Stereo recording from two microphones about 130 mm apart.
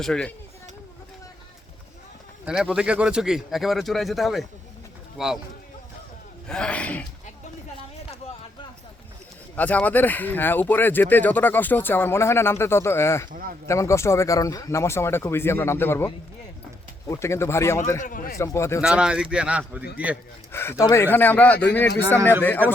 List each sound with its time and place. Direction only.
0.0 s speech: 5° left (ahead or behind)
2.5 s speech: 5° right (ahead or behind)
6.5 s speech: 10° left (ahead or behind)
9.6 s speech: 10° left (ahead or behind)
13.3 s speech: 90° right
13.7 s speech: 20° left (ahead or behind)
17.1 s speech: 20° left (ahead or behind)
18.0 s speech: 90° left
18.3 s speech: 20° left (ahead or behind)
18.8 s a man's voice: 5° right (ahead or behind)
20.5 s speech: 20° left (ahead or behind)
22.2 s a man's voice: 15° right (ahead or behind)